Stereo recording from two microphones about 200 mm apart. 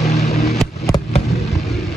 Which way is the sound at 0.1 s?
35° left (ahead or behind).